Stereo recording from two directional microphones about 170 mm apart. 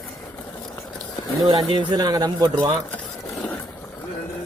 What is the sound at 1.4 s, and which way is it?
Speech, 25° right (ahead or behind).